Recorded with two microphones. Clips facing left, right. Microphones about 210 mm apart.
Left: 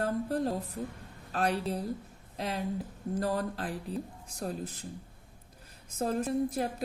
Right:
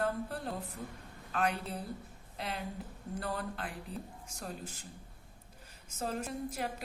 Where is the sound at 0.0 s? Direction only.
40° left (ahead or behind).